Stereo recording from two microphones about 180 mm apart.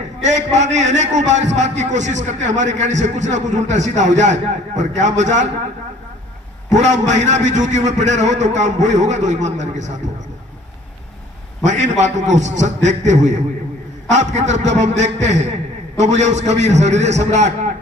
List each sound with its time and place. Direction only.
0.2 s a man's voice: 40° right (ahead or behind)
6.7 s a man's voice: 40° right (ahead or behind)
11.6 s a man's voice: 40° right (ahead or behind)